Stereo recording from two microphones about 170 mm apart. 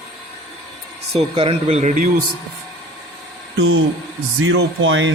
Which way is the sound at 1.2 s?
35° right (ahead or behind).